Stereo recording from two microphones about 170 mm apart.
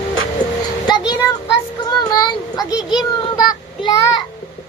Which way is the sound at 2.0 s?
25° left (ahead or behind).